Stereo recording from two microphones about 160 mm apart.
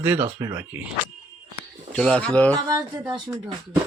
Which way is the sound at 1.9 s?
5° left (ahead or behind).